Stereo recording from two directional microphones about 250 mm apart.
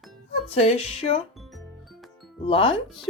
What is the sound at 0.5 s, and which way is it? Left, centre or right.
Speech, left.